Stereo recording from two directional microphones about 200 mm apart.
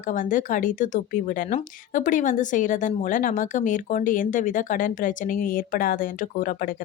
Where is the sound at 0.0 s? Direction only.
40° left (ahead or behind).